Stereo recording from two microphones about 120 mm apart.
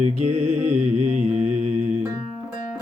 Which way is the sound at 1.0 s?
80° right.